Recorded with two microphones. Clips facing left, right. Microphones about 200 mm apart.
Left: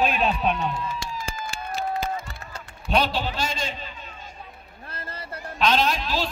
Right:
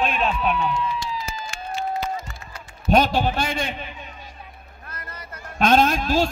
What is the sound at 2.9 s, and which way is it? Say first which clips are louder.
A man's voice: right 5 dB; 45° right (ahead or behind).